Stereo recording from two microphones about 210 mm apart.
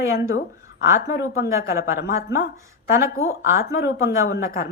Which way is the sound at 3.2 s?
50° left (ahead or behind).